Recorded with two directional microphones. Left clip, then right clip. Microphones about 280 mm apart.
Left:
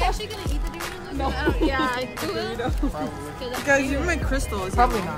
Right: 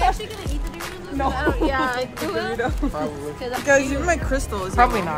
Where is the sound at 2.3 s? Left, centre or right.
Centre.